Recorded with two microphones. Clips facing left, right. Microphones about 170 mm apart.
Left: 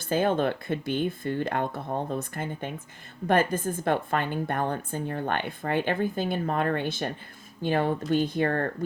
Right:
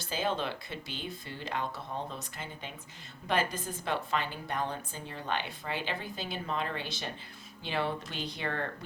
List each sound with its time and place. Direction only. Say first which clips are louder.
0.0 s a woman's voice: left 9 dB; 55° left (ahead or behind)